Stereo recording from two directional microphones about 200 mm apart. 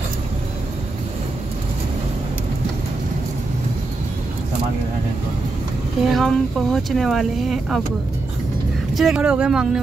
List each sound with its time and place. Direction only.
6.0 s speech: centre (ahead or behind)
8.9 s speech: 5° right (ahead or behind)